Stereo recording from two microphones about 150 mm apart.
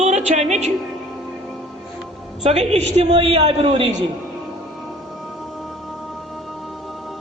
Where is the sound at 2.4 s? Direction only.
45° right (ahead or behind).